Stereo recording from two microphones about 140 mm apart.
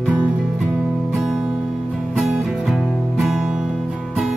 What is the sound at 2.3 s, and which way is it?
Music, 5° right (ahead or behind).